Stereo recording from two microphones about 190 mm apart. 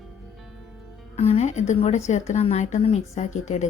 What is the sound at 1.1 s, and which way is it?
A woman's voice, 35° left (ahead or behind).